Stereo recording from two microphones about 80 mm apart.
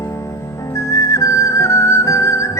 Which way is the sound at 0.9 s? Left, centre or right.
Left.